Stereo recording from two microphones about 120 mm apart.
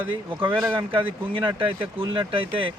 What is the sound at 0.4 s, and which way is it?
Speech, 45° right (ahead or behind).